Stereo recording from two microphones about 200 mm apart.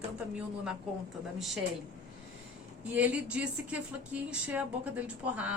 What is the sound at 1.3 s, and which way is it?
Speech, centre (ahead or behind).